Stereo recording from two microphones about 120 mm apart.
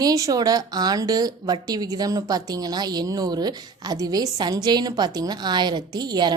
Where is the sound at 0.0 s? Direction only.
30° right (ahead or behind).